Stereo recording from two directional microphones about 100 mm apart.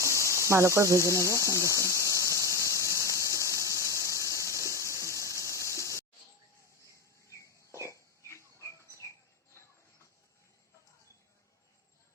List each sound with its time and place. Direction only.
0.0 s cricket: 30° left (ahead or behind)
0.4 s speech: 30° right (ahead or behind)
1.4 s squeal: 30° left (ahead or behind)
7.9 s a sound: 30° left (ahead or behind)